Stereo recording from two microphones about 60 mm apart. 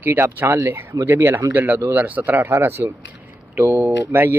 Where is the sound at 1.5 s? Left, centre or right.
Right.